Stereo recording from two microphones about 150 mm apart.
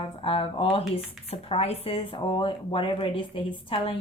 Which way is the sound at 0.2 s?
40° left (ahead or behind).